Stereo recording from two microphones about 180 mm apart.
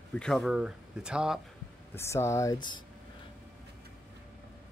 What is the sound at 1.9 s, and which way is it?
Speech, 15° left (ahead or behind).